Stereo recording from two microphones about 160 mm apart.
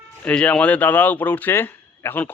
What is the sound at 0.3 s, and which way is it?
Speech, 5° left (ahead or behind).